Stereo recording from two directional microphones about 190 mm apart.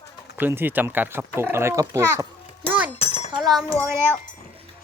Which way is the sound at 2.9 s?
35° left (ahead or behind).